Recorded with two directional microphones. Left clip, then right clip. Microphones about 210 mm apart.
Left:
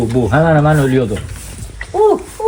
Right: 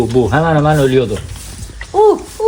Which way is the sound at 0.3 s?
20° right (ahead or behind).